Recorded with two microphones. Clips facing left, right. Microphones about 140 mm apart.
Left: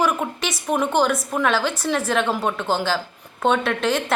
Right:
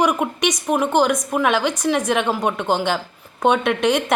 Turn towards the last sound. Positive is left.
turn(degrees=-15)  # may be behind; listen again after turning